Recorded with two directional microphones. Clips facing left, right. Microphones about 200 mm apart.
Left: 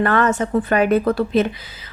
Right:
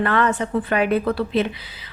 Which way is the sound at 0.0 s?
45° left (ahead or behind).